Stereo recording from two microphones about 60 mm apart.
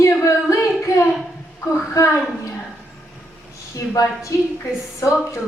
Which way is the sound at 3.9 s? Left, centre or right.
Left.